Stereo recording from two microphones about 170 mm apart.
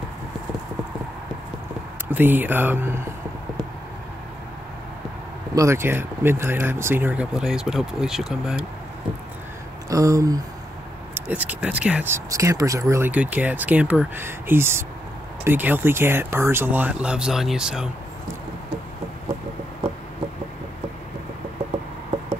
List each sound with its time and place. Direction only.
2.0 s speech: 10° right (ahead or behind)
5.5 s speech: 15° right (ahead or behind)
9.8 s a sound: 20° right (ahead or behind)
11.1 s speech: 10° right (ahead or behind)